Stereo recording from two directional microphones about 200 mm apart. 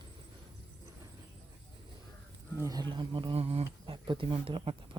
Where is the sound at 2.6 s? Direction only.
20° right (ahead or behind).